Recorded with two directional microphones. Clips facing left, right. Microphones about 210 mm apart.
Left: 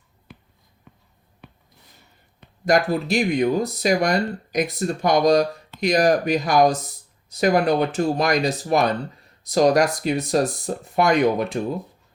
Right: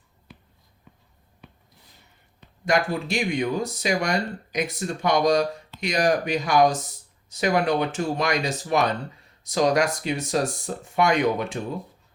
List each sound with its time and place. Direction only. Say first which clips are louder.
2.6 s speech: left 4 dB; 40° left (ahead or behind)